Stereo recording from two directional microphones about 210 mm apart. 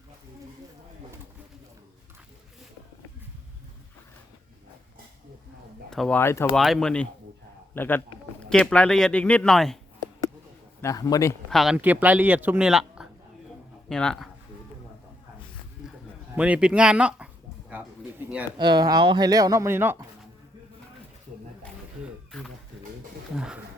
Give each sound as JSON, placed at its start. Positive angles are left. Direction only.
{"t": 5.9, "sound": "speech", "side_deg": 5}
{"t": 10.8, "sound": "a man's voice", "side_deg": 15}
{"t": 11.5, "sound": "speech", "side_deg": 0}
{"t": 16.4, "sound": "speech", "side_deg": -5}
{"t": 18.5, "sound": "speech", "side_deg": -20}
{"t": 22.0, "sound": "a sound", "side_deg": 0}